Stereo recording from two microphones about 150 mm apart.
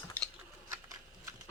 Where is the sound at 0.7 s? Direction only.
20° right (ahead or behind).